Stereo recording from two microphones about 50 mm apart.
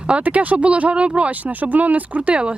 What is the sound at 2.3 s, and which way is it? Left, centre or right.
Speech, right.